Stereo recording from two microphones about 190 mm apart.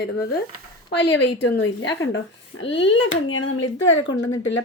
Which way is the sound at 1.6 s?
80° left.